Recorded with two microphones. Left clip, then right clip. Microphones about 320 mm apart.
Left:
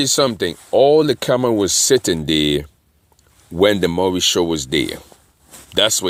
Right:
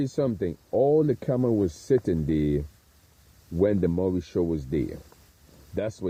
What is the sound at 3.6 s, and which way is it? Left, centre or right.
Speech, centre.